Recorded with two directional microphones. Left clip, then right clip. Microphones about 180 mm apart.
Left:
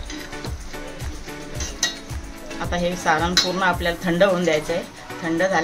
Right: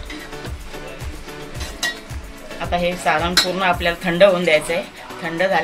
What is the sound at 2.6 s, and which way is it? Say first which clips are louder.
Speech: right 2 dB; 35° left (ahead or behind).